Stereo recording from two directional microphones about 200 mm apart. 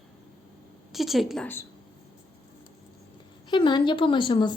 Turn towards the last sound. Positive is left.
turn(degrees=25)  # may be behind; listen again after turning